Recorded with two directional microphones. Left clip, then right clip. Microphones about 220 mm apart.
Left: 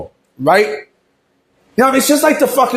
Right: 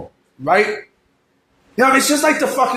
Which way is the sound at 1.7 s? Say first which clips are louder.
Left 2 dB; 35° left (ahead or behind).